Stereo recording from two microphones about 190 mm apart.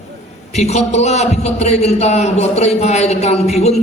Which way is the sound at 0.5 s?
35° left (ahead or behind).